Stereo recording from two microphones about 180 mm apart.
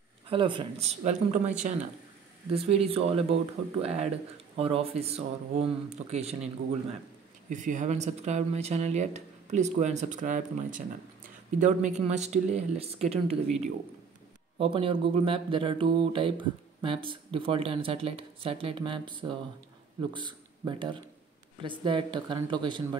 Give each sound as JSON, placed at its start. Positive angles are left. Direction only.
{"t": 0.3, "sound": "speech", "side_deg": -25}
{"t": 2.5, "sound": "speech", "side_deg": -35}
{"t": 4.6, "sound": "speech", "side_deg": -35}